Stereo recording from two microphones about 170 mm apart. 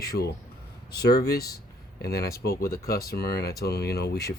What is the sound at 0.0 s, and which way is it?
Speech, 65° left (ahead or behind).